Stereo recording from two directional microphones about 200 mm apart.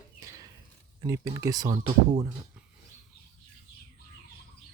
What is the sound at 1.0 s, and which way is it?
Speech, 15° right (ahead or behind).